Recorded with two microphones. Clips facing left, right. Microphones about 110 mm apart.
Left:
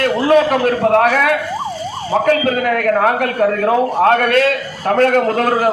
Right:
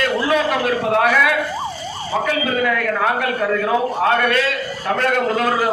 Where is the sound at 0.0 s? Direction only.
55° left (ahead or behind).